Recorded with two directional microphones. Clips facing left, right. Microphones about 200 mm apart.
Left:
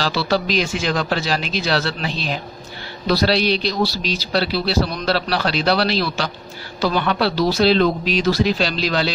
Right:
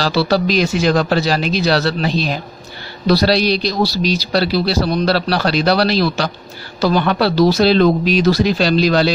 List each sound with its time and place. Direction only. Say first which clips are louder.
0.0 s a man's voice: right 5 dB; 40° right (ahead or behind)